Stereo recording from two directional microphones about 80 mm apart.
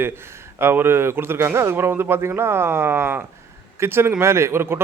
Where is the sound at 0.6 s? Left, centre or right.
Right.